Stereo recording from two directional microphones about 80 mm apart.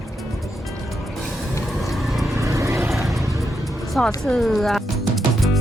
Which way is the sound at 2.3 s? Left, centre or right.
Right.